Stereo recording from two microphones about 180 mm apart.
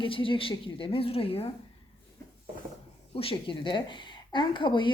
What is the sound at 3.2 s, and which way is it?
A woman's voice, 30° left (ahead or behind).